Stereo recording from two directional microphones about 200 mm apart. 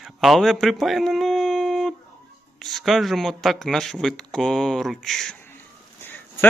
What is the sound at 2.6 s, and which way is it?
Speech, centre (ahead or behind).